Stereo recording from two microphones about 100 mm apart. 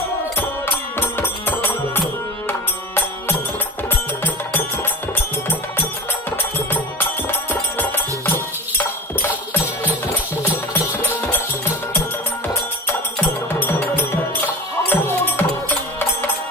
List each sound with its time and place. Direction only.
0.9 s music: 20° left (ahead or behind)
13.5 s music: 25° left (ahead or behind)